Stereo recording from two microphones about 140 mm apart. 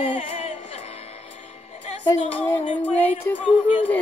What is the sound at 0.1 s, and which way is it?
Music, 45° left (ahead or behind).